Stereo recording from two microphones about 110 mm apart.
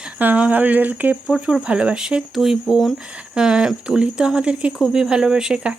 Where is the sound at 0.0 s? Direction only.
15° right (ahead or behind).